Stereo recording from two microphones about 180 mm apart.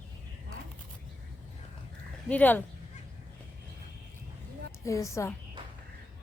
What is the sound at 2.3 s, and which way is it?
Speech, 10° left (ahead or behind).